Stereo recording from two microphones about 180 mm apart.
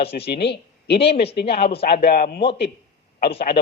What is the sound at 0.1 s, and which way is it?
A man's voice, 65° left (ahead or behind).